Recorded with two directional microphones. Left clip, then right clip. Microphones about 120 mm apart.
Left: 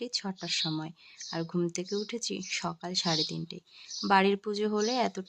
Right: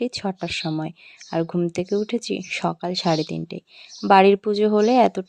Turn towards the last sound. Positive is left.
turn(degrees=-50)  # may be behind; listen again after turning